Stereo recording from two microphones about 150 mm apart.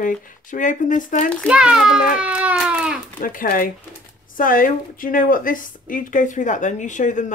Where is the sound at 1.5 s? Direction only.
5° right (ahead or behind).